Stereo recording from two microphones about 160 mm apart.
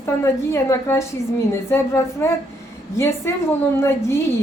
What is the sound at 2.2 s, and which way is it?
A woman's voice, 10° left (ahead or behind).